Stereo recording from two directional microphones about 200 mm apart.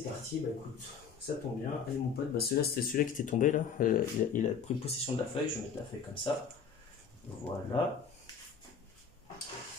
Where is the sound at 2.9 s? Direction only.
40° left (ahead or behind).